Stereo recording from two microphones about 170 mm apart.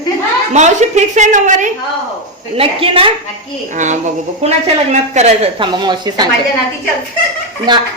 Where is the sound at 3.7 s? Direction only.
45° right (ahead or behind); by 6.2 s 25° right (ahead or behind).